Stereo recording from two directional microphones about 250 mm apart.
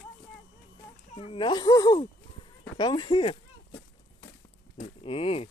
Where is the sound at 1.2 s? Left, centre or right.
Left.